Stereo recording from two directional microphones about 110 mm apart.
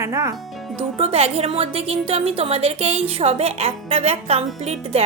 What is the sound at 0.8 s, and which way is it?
A woman's voice, 65° right (ahead or behind).